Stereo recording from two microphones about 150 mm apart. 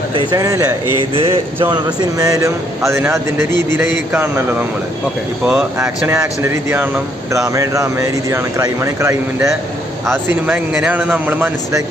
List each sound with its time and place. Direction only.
0.3 s speech: 20° right (ahead or behind)
1.1 s speech: 40° right (ahead or behind)
1.7 s speech: 25° right (ahead or behind)
6.1 s speech: 15° right (ahead or behind)
10.4 s speech: 5° right (ahead or behind)